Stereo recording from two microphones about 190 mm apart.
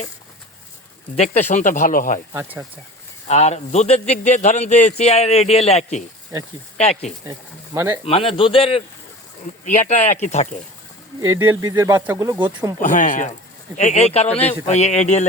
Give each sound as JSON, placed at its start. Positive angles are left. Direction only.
{"t": 1.1, "sound": "a man's voice", "side_deg": 35}
{"t": 2.3, "sound": "speech", "side_deg": -15}
{"t": 3.2, "sound": "a man's voice", "side_deg": 35}
{"t": 7.3, "sound": "speech", "side_deg": -15}
{"t": 8.0, "sound": "a man's voice", "side_deg": 30}
{"t": 9.6, "sound": "a man's voice", "side_deg": 40}
{"t": 11.2, "sound": "speech", "side_deg": -15}
{"t": 12.8, "sound": "a man's voice", "side_deg": 40}